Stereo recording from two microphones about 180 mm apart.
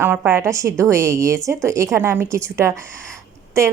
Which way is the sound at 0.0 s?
10° right (ahead or behind).